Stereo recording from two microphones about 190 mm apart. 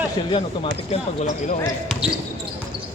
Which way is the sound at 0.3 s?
25° left (ahead or behind).